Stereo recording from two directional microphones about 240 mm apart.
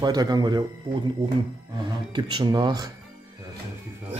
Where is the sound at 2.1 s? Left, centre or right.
Centre.